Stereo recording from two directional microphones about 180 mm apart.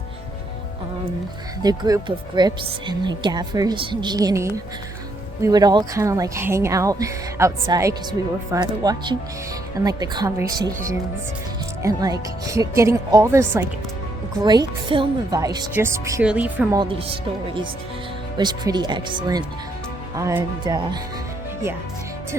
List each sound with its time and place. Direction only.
1.6 s speech: 25° right (ahead or behind)
14.4 s speech: 25° right (ahead or behind); by 16.6 s 5° right (ahead or behind)
18.3 s speech: 25° right (ahead or behind)